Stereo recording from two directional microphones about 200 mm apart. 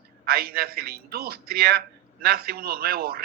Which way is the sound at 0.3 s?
50° right (ahead or behind).